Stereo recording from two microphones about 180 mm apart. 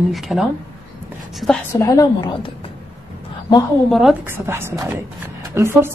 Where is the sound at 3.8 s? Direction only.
Centre (ahead or behind).